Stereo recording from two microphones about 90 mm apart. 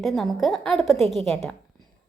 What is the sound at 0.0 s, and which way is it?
A woman's voice, centre (ahead or behind).